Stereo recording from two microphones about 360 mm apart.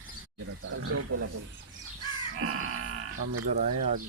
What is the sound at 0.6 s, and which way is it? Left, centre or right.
Wild animals, right.